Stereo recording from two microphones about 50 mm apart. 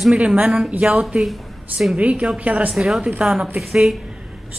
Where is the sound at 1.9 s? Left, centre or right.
Right.